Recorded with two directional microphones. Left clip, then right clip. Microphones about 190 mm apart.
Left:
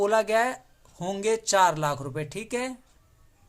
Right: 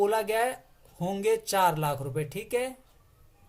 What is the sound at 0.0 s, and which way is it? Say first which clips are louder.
Speech: left 3 dB; 35° left (ahead or behind).